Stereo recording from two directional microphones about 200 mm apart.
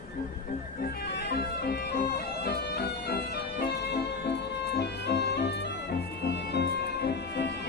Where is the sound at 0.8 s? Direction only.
55° left (ahead or behind).